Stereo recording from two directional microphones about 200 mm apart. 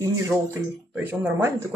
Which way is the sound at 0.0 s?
10° right (ahead or behind).